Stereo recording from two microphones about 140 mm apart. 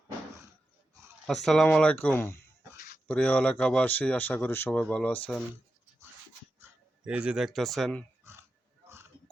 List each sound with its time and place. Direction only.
1.3 s speech: centre (ahead or behind)
2.7 s a sound: 90° left
3.1 s speech: 10° left (ahead or behind)
6.6 s speech: 10° right (ahead or behind)